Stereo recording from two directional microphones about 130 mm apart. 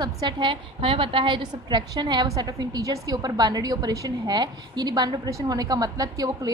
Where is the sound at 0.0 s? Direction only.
35° right (ahead or behind).